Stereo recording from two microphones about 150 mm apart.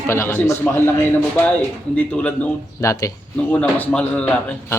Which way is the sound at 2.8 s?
20° left (ahead or behind).